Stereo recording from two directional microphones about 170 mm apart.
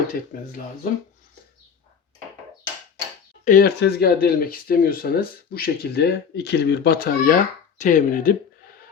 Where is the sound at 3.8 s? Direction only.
65° left (ahead or behind).